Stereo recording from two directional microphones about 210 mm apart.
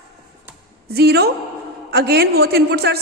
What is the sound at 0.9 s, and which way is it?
A woman's voice, 50° right (ahead or behind).